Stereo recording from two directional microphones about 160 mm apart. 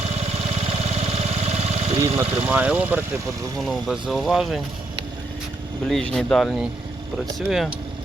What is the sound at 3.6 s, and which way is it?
Speech, centre (ahead or behind).